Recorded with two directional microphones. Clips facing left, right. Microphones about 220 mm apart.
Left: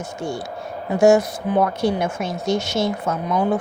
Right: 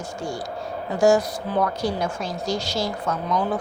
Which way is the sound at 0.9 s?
25° left (ahead or behind).